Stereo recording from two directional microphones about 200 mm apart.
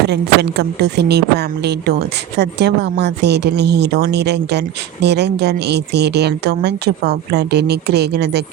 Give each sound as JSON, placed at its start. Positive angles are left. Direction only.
{"t": 0.1, "sound": "speech", "side_deg": -55}